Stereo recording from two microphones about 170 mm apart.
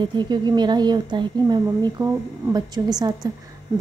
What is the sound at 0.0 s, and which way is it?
A woman's voice, 25° right (ahead or behind).